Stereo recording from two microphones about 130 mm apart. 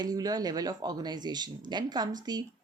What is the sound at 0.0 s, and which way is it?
A woman's voice, 30° right (ahead or behind).